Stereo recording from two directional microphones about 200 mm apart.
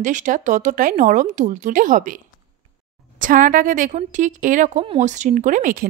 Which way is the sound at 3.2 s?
40° right (ahead or behind).